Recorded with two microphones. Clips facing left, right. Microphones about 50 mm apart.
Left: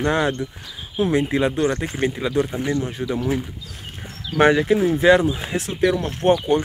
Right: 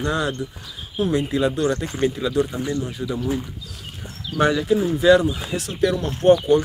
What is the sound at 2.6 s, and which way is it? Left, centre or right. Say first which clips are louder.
Speech: left 2 dB; left.